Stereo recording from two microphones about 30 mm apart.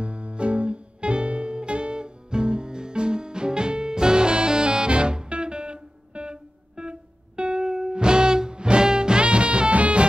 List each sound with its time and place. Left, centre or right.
0.0 s music: right